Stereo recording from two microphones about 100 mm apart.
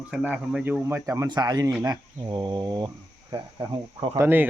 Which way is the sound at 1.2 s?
45° right (ahead or behind).